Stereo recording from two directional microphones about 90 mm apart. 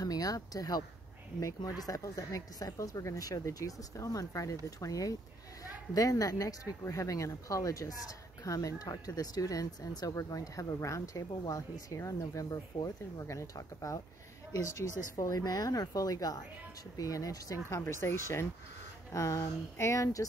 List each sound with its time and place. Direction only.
0.0 s speech: 45° left (ahead or behind)